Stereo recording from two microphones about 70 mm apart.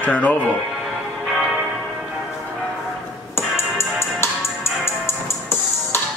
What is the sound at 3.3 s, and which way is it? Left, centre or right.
Music, left.